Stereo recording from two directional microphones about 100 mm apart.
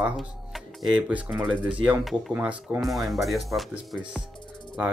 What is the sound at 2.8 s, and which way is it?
Speech, centre (ahead or behind).